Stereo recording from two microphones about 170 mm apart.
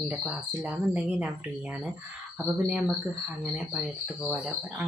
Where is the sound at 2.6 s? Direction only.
5° right (ahead or behind).